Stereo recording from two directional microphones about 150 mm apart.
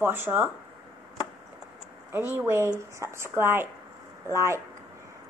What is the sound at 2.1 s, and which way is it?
Speech, 15° right (ahead or behind).